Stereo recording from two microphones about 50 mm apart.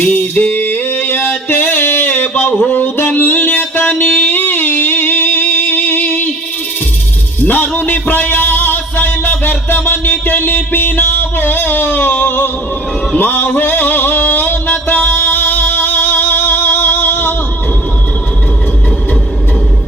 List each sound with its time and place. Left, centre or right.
0.0 s music: left
2.6 s a sound: left
3.2 s music: left
7.4 s music: left